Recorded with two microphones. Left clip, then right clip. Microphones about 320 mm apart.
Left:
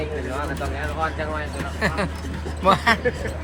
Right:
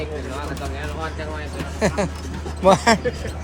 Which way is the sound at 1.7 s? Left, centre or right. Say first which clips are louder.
Right 3 dB; centre.